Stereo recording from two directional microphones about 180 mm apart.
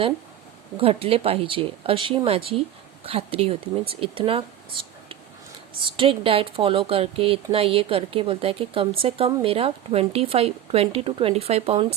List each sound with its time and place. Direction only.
0.8 s a woman's voice: 30° right (ahead or behind)